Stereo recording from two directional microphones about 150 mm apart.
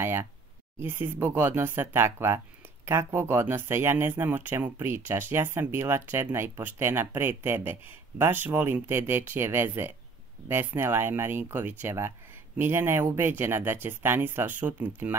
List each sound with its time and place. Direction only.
0.0 s speech: 15° right (ahead or behind)